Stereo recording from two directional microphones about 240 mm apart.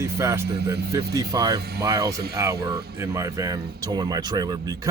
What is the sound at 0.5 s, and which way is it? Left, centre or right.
Speech, right.